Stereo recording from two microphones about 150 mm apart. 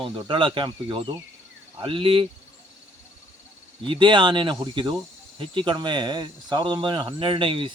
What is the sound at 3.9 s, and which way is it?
Speech, 30° right (ahead or behind).